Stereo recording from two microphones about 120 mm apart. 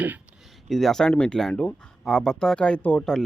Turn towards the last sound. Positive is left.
turn(degrees=5)  # may be behind; listen again after turning